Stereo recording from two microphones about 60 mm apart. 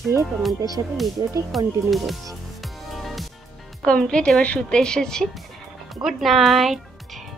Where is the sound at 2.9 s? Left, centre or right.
Centre.